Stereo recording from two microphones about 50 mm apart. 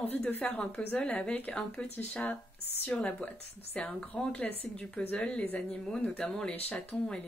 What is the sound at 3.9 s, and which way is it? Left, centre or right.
A man's voice, centre.